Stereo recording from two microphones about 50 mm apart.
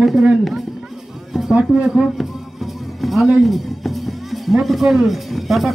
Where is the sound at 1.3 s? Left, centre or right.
Centre.